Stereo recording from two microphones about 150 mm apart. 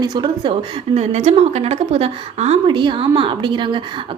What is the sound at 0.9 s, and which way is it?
A woman's voice, 50° right (ahead or behind).